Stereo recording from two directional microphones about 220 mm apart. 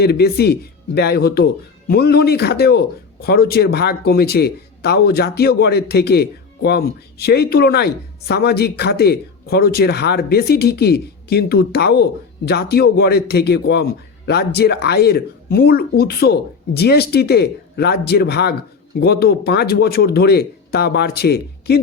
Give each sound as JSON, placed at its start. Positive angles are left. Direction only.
{"t": 0.0, "sound": "speech", "side_deg": 45}